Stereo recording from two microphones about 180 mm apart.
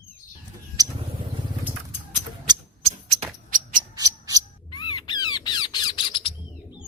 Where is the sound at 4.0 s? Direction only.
20° right (ahead or behind).